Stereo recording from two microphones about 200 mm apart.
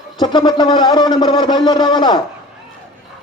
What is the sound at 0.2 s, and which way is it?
A man's voice, 20° left (ahead or behind).